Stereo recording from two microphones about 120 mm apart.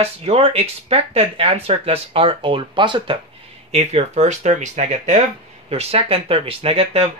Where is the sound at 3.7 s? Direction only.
65° right (ahead or behind).